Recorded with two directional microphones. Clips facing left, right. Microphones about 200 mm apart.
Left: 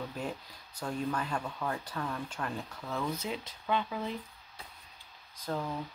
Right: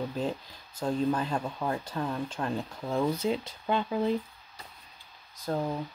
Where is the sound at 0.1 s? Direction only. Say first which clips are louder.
Right 6 dB; 25° right (ahead or behind).